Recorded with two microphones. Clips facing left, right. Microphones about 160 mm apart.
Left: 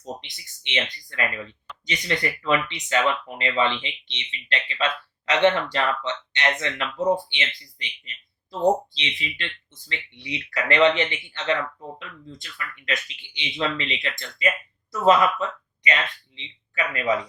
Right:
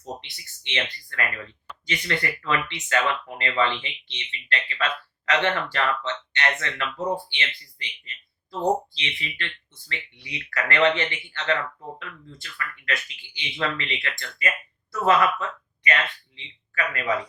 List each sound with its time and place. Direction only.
0.0 s speech: 20° left (ahead or behind)